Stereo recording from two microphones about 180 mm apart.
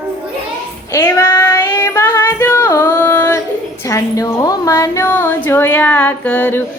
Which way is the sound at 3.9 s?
20° left (ahead or behind).